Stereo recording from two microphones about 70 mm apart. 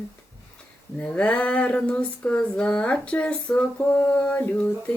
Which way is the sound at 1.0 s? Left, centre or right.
Centre.